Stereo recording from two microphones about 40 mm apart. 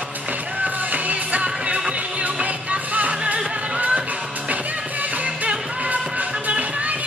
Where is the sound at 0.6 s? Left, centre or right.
Right.